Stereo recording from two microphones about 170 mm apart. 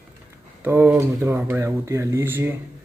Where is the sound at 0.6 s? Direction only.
15° right (ahead or behind).